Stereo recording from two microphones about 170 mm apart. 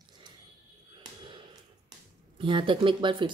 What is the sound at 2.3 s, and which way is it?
Speech, 30° right (ahead or behind).